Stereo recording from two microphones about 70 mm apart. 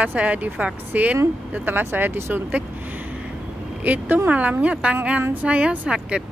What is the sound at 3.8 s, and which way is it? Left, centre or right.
A woman's voice, right.